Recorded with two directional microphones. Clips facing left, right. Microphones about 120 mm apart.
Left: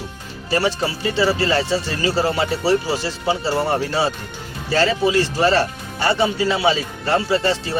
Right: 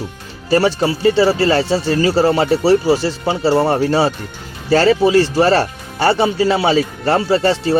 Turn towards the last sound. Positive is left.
turn(degrees=-40)  # may be behind; listen again after turning